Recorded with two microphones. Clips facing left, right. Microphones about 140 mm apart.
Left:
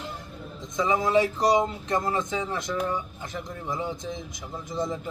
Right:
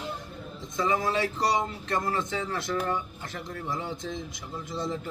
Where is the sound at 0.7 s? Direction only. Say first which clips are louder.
Left 4 dB; 20° left (ahead or behind).